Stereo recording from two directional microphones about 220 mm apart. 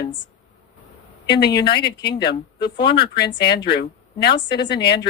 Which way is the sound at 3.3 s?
50° left (ahead or behind).